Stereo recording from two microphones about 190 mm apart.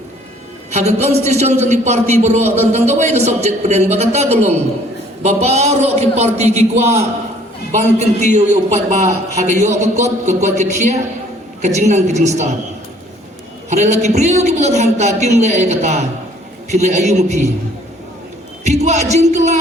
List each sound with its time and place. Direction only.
0.7 s a man's voice: 35° right (ahead or behind)
13.7 s a man's voice: 35° right (ahead or behind)
18.6 s a man's voice: 35° right (ahead or behind)